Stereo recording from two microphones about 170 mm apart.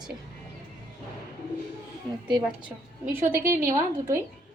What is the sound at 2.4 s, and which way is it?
A woman's voice, 10° right (ahead or behind).